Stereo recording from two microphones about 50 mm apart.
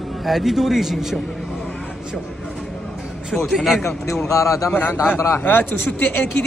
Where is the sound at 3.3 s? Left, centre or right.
Centre.